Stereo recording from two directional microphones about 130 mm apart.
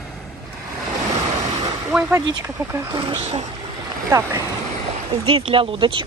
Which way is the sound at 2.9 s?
50° right (ahead or behind).